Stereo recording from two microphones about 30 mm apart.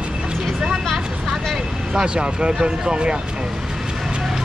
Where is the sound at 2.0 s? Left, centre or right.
Right.